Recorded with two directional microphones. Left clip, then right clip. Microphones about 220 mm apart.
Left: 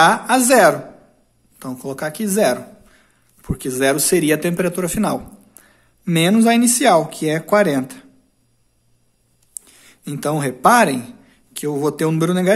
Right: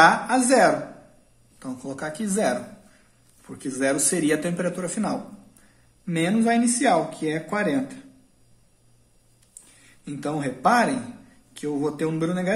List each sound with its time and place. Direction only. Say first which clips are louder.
0.0 s speech: left 4 dB; 45° left (ahead or behind)
10.0 s speech: left 7 dB; 50° left (ahead or behind)